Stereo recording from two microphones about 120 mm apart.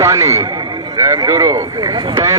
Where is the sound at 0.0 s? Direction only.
25° right (ahead or behind).